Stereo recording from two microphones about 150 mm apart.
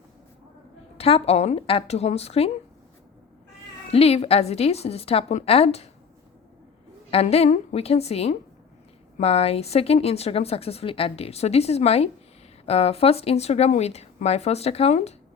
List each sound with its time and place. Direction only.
0.9 s speech: 40° left (ahead or behind)
3.9 s speech: 40° left (ahead or behind)
7.1 s speech: 45° left (ahead or behind)